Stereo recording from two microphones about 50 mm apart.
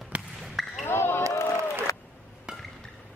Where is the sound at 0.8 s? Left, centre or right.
Left.